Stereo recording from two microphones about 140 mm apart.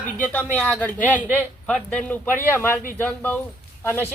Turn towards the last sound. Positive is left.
turn(degrees=15)  # may be behind; listen again after turning